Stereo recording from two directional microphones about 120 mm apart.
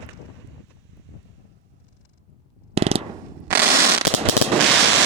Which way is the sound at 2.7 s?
60° right (ahead or behind).